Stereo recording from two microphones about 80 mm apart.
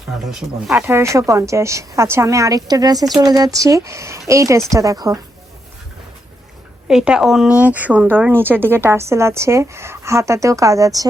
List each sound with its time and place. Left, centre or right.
0.3 s speech: centre
0.8 s a woman's voice: right
6.8 s a woman's voice: centre; by 11.1 s right